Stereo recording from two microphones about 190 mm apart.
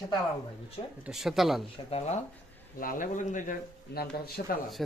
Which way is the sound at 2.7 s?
45° left (ahead or behind).